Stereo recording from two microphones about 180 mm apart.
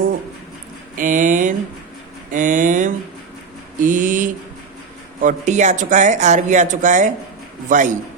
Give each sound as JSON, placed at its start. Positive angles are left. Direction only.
{"t": 0.9, "sound": "a sound", "side_deg": -45}
{"t": 3.8, "sound": "mantra", "side_deg": -45}
{"t": 5.2, "sound": "speech", "side_deg": -40}